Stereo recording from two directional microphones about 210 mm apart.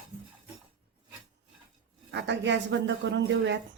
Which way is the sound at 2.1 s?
55° right (ahead or behind).